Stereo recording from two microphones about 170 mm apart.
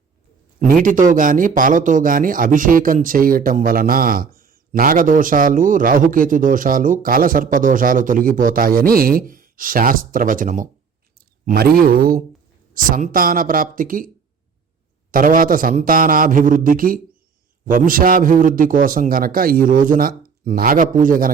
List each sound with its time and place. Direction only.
0.6 s a man's voice: 55° right (ahead or behind)
11.4 s a man's voice: 65° right (ahead or behind)
15.1 s a man's voice: 55° right (ahead or behind)